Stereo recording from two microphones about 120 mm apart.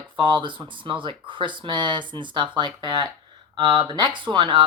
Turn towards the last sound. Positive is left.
turn(degrees=-45)  # may be behind; listen again after turning